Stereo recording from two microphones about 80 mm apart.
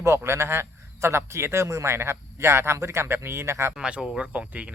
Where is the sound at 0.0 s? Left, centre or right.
Right.